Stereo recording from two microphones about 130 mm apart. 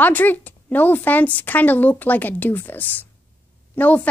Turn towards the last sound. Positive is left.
turn(degrees=10)  # may be behind; listen again after turning